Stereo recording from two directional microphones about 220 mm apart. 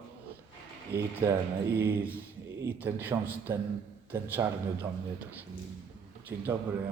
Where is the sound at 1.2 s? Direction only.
15° right (ahead or behind).